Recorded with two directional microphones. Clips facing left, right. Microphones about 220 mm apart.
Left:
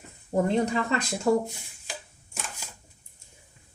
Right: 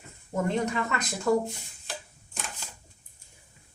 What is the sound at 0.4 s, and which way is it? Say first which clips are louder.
Speech: left 1 dB; 30° left (ahead or behind).